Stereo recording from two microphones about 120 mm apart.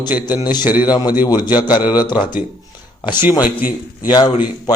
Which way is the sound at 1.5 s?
35° left (ahead or behind).